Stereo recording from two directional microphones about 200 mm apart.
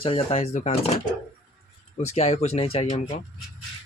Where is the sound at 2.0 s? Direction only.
35° left (ahead or behind).